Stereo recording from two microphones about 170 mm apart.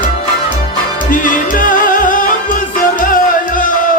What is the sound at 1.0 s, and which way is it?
Music, 50° left (ahead or behind).